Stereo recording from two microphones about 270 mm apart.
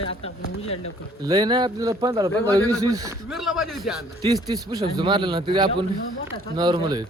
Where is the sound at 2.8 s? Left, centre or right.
Centre.